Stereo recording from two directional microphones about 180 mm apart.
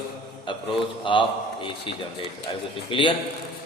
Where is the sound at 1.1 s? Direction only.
25° left (ahead or behind).